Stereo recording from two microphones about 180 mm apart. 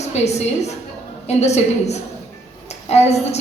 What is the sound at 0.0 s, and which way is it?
A woman's voice, 40° left (ahead or behind).